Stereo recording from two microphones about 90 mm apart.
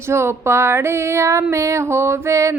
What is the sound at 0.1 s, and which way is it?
Female singing, 30° right (ahead or behind).